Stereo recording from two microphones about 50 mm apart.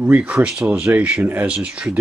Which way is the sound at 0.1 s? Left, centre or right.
Right.